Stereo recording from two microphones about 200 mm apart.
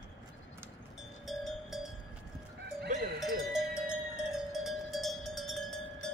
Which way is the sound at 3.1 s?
5° right (ahead or behind).